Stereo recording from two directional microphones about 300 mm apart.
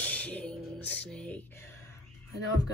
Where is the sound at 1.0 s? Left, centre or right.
Centre.